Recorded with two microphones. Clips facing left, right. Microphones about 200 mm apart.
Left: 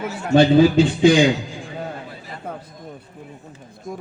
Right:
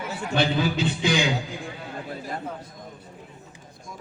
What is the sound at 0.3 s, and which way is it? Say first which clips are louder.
Speech: left 11 dB; 50° left (ahead or behind).